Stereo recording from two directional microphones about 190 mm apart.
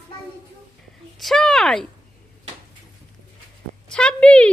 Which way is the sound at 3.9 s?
5° left (ahead or behind).